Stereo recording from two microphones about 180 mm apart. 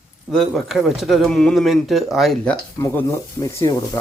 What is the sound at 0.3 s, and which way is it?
Speech, centre (ahead or behind).